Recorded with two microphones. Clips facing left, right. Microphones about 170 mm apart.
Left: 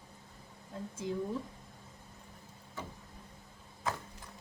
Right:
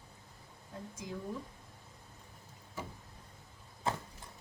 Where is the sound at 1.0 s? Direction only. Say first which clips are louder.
Left 7 dB; 30° left (ahead or behind).